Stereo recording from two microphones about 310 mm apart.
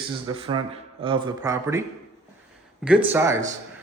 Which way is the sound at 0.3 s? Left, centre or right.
Centre.